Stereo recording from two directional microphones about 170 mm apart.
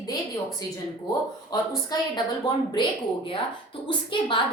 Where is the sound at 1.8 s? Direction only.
25° left (ahead or behind).